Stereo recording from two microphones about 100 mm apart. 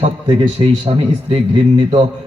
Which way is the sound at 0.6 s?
55° right (ahead or behind).